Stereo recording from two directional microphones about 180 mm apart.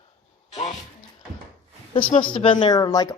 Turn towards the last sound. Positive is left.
turn(degrees=20)  # may be behind; listen again after turning